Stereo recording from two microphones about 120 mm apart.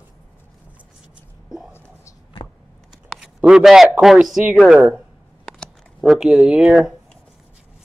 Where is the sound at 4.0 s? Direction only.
5° right (ahead or behind).